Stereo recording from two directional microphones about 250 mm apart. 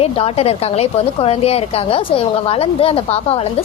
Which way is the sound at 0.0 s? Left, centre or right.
Left.